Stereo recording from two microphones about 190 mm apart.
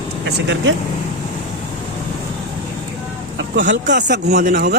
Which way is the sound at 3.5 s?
75° right (ahead or behind).